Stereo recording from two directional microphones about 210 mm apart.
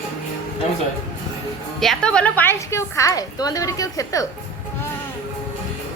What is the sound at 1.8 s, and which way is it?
A woman's voice, 5° left (ahead or behind).